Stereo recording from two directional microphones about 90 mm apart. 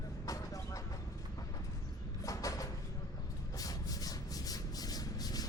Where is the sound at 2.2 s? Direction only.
40° left (ahead or behind).